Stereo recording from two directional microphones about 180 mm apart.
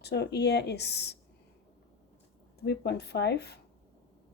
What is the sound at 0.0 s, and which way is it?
Speech, 65° left (ahead or behind).